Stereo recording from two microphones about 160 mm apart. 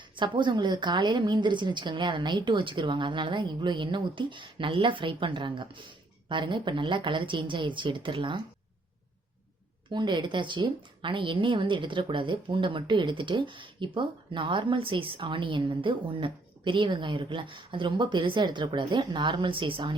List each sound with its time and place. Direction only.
0.2 s a woman's voice: 30° right (ahead or behind)
9.9 s a woman's voice: 30° right (ahead or behind)